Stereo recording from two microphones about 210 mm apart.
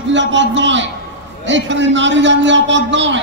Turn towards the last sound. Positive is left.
turn(degrees=-60)  # may be behind; listen again after turning